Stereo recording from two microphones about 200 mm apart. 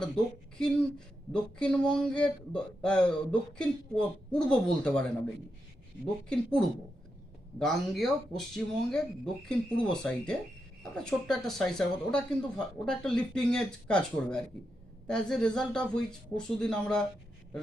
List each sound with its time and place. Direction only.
0.6 s speech: 5° left (ahead or behind)
6.2 s speech: 5° left (ahead or behind)